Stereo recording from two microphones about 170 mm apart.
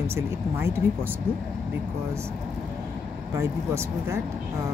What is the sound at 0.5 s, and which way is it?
Speech, 15° right (ahead or behind).